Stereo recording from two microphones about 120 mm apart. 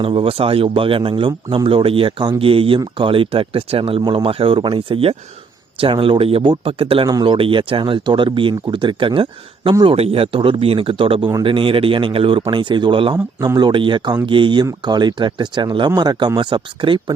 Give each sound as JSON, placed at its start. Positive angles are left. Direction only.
{"t": 0.0, "sound": "speech", "side_deg": -50}
{"t": 7.1, "sound": "speech", "side_deg": -35}
{"t": 7.3, "sound": "speech", "side_deg": -50}